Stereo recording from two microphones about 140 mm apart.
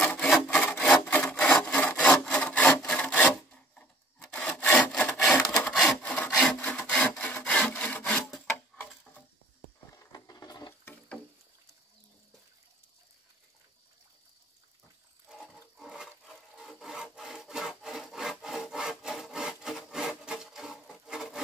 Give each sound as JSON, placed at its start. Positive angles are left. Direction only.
{"t": 0.0, "sound": "wood", "side_deg": 10}
{"t": 0.3, "sound": "sawing", "side_deg": 10}
{"t": 5.3, "sound": "wood", "side_deg": 10}
{"t": 5.8, "sound": "sawing", "side_deg": 10}
{"t": 8.5, "sound": "tick-tock", "side_deg": 10}
{"t": 9.9, "sound": "a sound", "side_deg": 25}
{"t": 10.7, "sound": "patter", "side_deg": 15}
{"t": 15.2, "sound": "wood", "side_deg": 0}